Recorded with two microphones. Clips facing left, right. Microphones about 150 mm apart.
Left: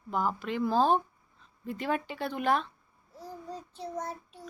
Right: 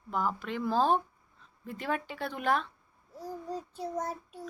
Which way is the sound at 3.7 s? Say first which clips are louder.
Right 1 dB; 45° right (ahead or behind).